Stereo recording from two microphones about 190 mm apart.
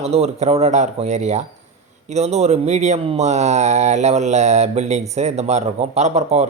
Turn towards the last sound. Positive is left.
turn(degrees=-35)  # may be behind; listen again after turning